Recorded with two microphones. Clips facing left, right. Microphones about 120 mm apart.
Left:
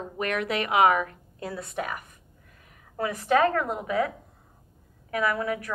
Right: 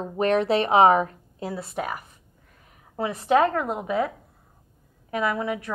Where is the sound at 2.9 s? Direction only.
25° right (ahead or behind).